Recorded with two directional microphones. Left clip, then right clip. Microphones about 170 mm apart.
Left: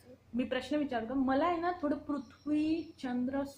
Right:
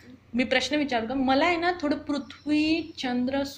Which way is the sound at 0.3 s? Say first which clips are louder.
Right 10 dB; centre (ahead or behind).